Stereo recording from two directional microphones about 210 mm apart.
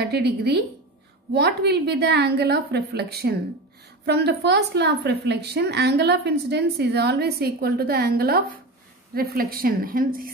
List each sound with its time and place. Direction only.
0.0 s a woman's voice: 50° right (ahead or behind)